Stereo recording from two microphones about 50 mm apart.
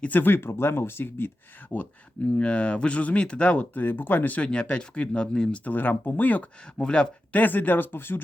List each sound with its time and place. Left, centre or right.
0.1 s speech: left
1.7 s speech: left
4.4 s speech: left
5.6 s speech: left
6.7 s speech: centre
7.3 s speech: left